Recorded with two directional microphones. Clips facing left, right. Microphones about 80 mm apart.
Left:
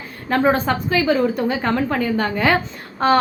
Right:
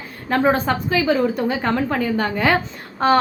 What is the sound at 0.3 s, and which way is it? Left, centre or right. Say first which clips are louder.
A woman's voice: even; centre.